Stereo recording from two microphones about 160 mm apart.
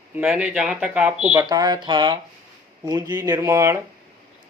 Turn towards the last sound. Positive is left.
turn(degrees=-20)  # may be behind; listen again after turning